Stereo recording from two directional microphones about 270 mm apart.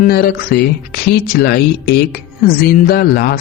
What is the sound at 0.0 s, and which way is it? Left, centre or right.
A man's voice, left.